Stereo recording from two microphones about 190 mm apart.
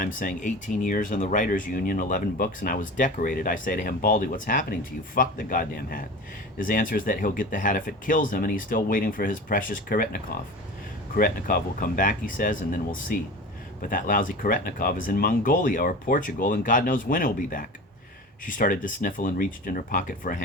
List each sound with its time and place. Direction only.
0.0 s speech: 45° left (ahead or behind)